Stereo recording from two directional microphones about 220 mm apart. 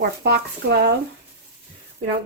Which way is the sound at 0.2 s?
45° right (ahead or behind).